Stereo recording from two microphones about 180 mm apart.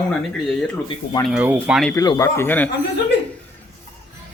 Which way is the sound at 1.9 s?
20° left (ahead or behind).